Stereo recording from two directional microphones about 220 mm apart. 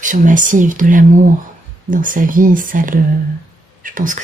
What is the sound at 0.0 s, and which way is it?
Speech, 35° right (ahead or behind).